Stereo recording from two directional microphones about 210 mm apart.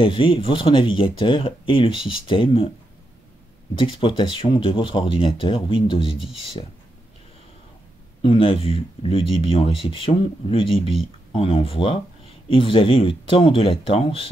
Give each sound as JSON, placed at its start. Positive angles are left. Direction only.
{"t": 0.0, "sound": "speech", "side_deg": 25}
{"t": 3.7, "sound": "speech", "side_deg": 25}
{"t": 8.2, "sound": "speech", "side_deg": 25}